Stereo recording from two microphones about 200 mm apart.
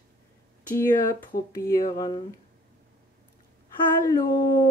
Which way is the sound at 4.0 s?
15° left (ahead or behind).